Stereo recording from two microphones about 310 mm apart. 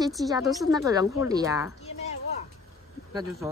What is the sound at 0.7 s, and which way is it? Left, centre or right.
Speech, centre.